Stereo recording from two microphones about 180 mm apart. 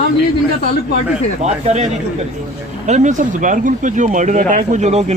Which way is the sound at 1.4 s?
35° right (ahead or behind).